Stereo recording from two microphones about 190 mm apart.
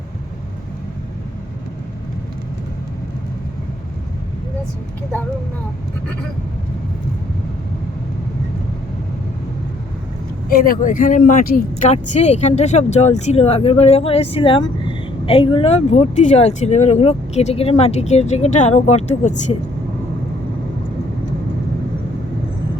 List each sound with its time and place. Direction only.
10.5 s speech: 50° left (ahead or behind)